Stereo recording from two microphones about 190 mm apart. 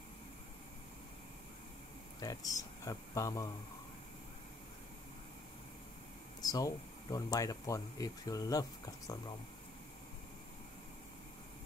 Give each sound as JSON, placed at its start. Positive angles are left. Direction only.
{"t": 2.1, "sound": "speech", "side_deg": 20}
{"t": 6.4, "sound": "speech", "side_deg": 20}